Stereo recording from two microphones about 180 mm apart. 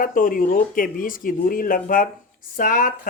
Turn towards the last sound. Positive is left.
turn(degrees=50)  # may be behind; listen again after turning